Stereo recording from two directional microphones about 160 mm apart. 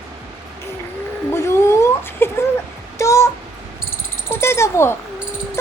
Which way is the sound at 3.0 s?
20° left (ahead or behind).